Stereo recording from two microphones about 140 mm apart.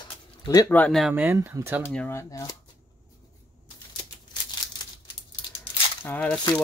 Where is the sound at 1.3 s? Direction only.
20° right (ahead or behind).